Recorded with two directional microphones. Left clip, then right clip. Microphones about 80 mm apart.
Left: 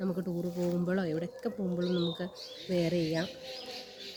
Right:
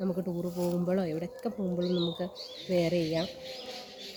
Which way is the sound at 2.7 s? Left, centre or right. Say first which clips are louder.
Right 3 dB; left.